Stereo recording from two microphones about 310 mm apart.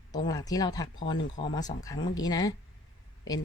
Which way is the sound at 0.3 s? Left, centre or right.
Centre.